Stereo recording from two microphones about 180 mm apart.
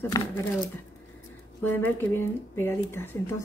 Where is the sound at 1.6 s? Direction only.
10° left (ahead or behind).